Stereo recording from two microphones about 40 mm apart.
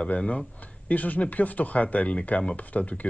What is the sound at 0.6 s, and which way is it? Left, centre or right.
Speech, left.